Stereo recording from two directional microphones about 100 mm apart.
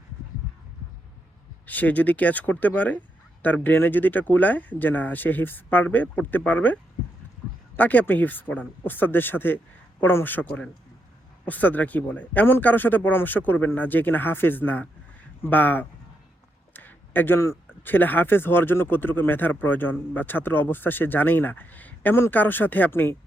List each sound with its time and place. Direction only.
1.6 s speech: 15° left (ahead or behind)
7.8 s speech: 15° left (ahead or behind)
16.7 s a sound: 20° left (ahead or behind)
17.8 s speech: 20° left (ahead or behind)